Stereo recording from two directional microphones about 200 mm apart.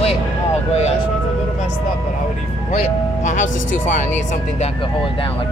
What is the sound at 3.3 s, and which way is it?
Speech, 40° left (ahead or behind).